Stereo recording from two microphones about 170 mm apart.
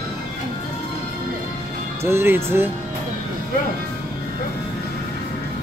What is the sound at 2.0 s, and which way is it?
Speech, 15° right (ahead or behind).